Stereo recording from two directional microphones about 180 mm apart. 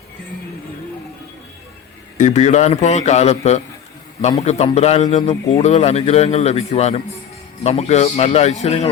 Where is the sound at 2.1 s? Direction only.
40° left (ahead or behind).